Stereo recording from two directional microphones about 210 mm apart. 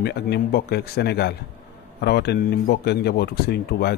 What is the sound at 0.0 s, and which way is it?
Speech, 50° left (ahead or behind).